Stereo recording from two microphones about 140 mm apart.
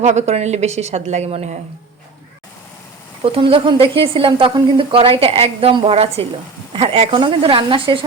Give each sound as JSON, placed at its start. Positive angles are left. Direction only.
{"t": 0.0, "sound": "a woman's voice", "side_deg": -55}
{"t": 3.3, "sound": "a woman's voice", "side_deg": -40}